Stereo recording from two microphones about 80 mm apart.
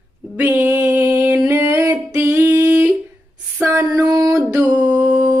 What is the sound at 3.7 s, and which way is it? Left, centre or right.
Music, right.